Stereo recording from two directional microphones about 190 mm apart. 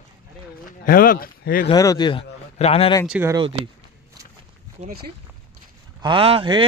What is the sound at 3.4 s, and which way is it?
Speech, 30° right (ahead or behind).